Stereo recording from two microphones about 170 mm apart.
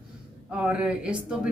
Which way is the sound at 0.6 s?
5° right (ahead or behind).